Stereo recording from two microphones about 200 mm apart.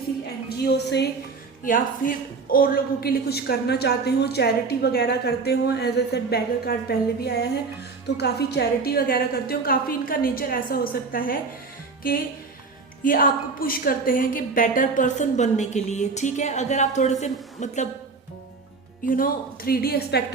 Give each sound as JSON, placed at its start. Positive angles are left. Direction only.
{"t": 0.4, "sound": "a woman's voice", "side_deg": 55}
{"t": 1.6, "sound": "a woman's voice", "side_deg": 40}
{"t": 13.1, "sound": "a woman's voice", "side_deg": 45}
{"t": 19.0, "sound": "a woman's voice", "side_deg": 45}